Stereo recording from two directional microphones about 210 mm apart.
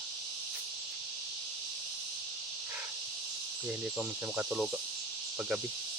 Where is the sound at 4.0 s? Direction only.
5° right (ahead or behind).